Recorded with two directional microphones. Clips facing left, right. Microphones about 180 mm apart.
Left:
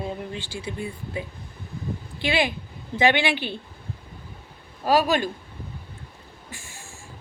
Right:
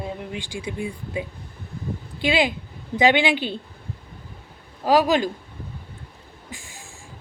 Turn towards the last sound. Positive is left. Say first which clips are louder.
# right 2 dB
turn(degrees=-15)  # may be behind; listen again after turning